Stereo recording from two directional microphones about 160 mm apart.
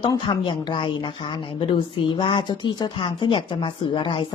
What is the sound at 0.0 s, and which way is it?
Speech, 25° left (ahead or behind).